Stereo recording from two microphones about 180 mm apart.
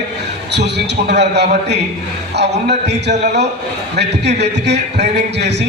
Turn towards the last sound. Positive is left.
turn(degrees=-70)  # may be behind; listen again after turning